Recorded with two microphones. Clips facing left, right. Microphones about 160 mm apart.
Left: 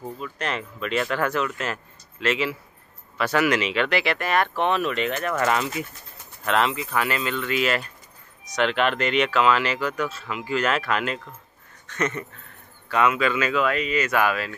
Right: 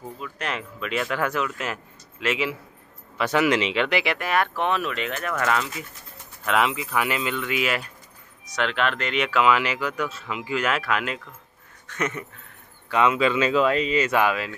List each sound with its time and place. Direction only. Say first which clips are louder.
0.2 s speech: left 1 dB; 5° right (ahead or behind)
6.4 s speech: even; 10° right (ahead or behind)
12.9 s speech: right 1 dB; 25° right (ahead or behind)